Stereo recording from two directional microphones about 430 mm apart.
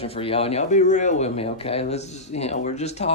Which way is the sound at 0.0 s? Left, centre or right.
Centre.